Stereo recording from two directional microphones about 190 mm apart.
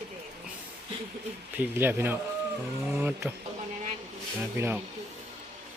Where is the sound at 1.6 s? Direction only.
10° right (ahead or behind).